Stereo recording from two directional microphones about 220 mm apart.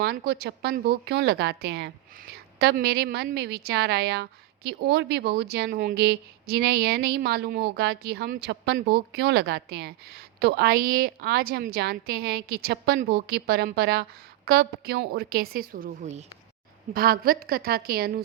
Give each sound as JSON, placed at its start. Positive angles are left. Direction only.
{"t": 0.0, "sound": "a woman's voice", "side_deg": -45}